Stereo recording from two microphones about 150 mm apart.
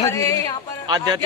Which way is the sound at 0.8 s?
30° right (ahead or behind).